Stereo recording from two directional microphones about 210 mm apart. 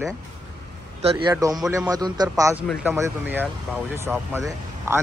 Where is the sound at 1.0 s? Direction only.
20° right (ahead or behind).